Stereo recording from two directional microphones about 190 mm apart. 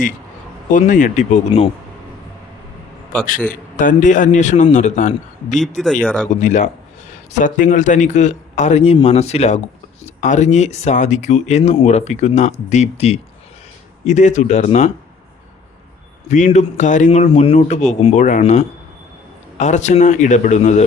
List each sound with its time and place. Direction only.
0.7 s speech: 40° left (ahead or behind)
3.5 s speech: 45° left (ahead or behind)
5.6 s speech: 5° left (ahead or behind)
6.4 s speech: 40° left (ahead or behind)
16.3 s speech: 40° left (ahead or behind)